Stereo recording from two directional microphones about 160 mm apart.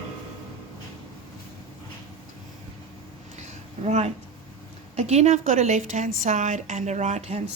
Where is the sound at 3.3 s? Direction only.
45° right (ahead or behind).